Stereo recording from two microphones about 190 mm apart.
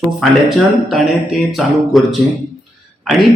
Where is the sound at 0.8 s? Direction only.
Centre (ahead or behind).